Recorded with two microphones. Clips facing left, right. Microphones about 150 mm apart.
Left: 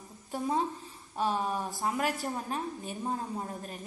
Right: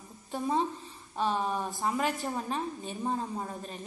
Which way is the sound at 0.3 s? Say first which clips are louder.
Right 1 dB; 10° left (ahead or behind).